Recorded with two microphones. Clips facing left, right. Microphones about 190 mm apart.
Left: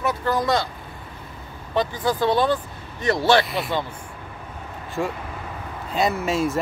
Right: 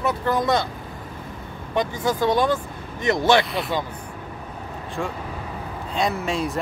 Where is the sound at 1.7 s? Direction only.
15° right (ahead or behind).